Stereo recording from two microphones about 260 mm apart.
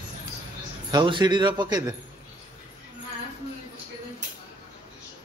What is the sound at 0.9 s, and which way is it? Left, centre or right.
Speech, centre.